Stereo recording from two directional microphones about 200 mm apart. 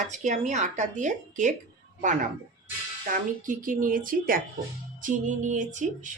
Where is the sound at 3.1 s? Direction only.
40° right (ahead or behind).